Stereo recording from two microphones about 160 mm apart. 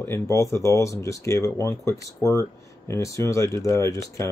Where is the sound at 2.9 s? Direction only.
20° left (ahead or behind).